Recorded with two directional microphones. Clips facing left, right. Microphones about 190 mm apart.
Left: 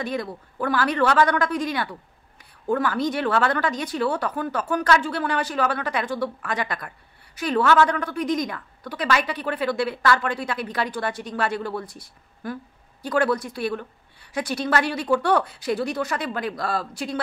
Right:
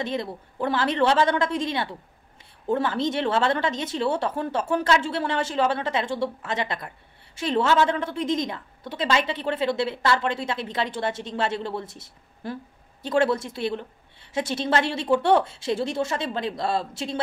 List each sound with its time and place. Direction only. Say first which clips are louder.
0.0 s a woman's voice: even; 25° right (ahead or behind)